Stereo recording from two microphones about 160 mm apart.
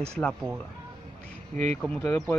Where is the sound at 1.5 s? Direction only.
45° right (ahead or behind).